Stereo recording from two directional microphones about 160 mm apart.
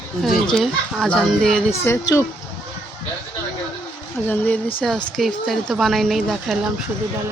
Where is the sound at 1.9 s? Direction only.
15° left (ahead or behind).